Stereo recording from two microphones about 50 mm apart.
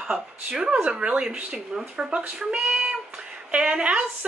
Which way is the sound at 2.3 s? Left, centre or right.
Centre.